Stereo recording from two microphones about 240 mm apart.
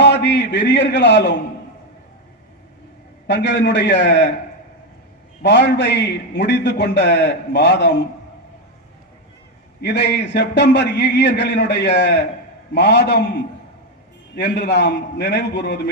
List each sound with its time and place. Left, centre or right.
0.0 s a man's voice: left
3.2 s a man's voice: left
5.4 s a man's voice: left
9.8 s a man's voice: left